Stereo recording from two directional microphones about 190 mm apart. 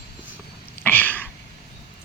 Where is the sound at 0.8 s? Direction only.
10° left (ahead or behind).